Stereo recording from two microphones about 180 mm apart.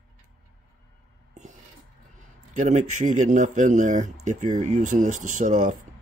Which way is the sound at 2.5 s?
45° right (ahead or behind).